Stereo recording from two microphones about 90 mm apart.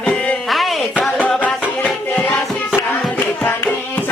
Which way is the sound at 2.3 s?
5° left (ahead or behind).